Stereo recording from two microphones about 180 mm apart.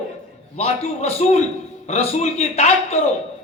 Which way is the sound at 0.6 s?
35° left (ahead or behind).